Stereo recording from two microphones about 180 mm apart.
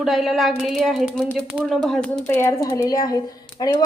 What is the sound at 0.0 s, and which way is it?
Speech, centre (ahead or behind).